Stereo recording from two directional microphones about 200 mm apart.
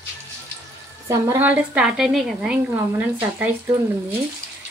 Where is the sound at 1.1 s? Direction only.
15° right (ahead or behind).